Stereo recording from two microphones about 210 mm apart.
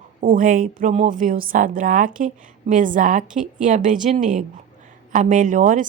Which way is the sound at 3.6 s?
35° right (ahead or behind).